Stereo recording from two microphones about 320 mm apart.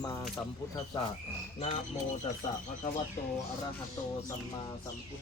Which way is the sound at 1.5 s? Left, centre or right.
Centre.